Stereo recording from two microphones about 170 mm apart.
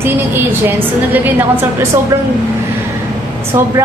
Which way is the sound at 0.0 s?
10° right (ahead or behind).